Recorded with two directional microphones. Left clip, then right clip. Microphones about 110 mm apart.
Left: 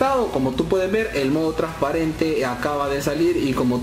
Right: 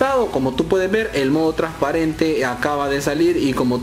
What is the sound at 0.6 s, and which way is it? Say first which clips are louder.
Speech: right 3 dB; 20° right (ahead or behind).